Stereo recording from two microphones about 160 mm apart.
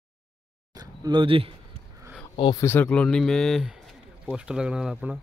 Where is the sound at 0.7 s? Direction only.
25° right (ahead or behind).